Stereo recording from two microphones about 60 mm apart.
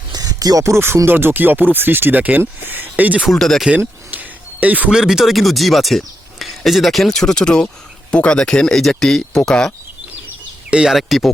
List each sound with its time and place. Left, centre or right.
0.1 s a sound: right
0.6 s music: right
1.0 s speech: right
3.2 s speech: centre
3.8 s a sound: right
4.9 s speech: centre
10.8 s speech: centre